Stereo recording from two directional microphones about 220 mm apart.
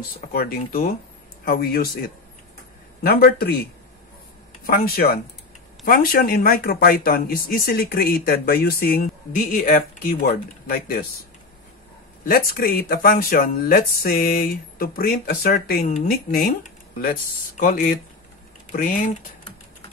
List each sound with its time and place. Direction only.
0.3 s speech: 40° left (ahead or behind)
4.6 s speech: 45° left (ahead or behind)
12.3 s speech: 40° left (ahead or behind)